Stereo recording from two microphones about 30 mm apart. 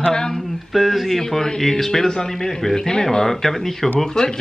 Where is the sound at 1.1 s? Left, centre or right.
Centre.